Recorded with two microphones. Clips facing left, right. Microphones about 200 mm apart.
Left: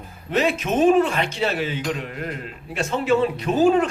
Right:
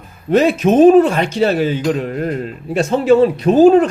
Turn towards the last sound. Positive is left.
turn(degrees=-35)  # may be behind; listen again after turning